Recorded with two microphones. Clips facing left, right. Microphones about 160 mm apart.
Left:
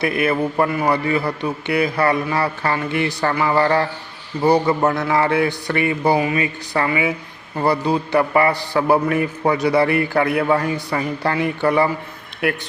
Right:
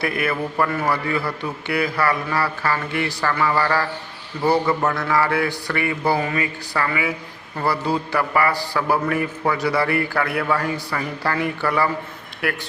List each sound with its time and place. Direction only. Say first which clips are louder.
0.0 s a man's voice: left 4 dB; 20° left (ahead or behind)